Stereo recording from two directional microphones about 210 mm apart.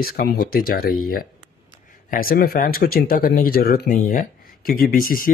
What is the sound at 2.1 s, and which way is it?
Speech, 45° left (ahead or behind).